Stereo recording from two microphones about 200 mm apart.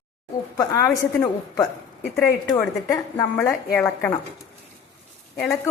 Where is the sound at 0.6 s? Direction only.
15° left (ahead or behind).